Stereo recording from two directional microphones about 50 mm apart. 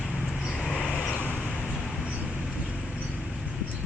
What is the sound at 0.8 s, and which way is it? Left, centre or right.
Vehicle, centre.